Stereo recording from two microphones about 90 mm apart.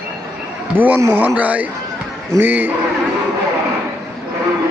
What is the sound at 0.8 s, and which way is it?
A man's voice, 20° right (ahead or behind).